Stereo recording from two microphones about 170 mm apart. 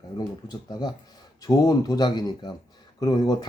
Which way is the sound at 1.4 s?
20° left (ahead or behind).